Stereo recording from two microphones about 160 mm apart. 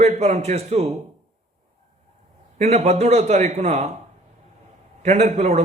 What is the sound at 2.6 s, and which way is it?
A man's voice, 45° right (ahead or behind).